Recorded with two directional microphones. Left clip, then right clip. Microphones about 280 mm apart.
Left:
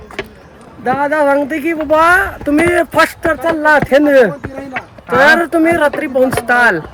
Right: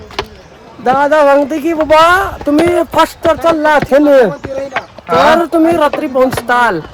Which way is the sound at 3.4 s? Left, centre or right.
Centre.